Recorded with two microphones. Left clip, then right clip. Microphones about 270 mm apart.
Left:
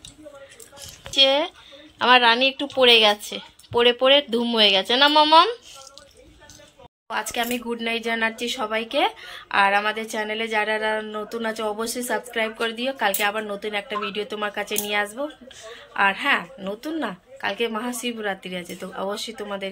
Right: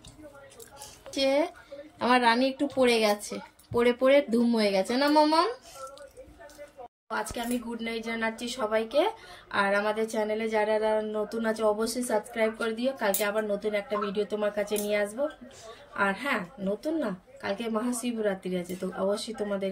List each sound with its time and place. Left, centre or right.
1.1 s speech: centre
4.3 s speech: centre
4.6 s speech: centre
5.1 s speech: centre
7.1 s speech: centre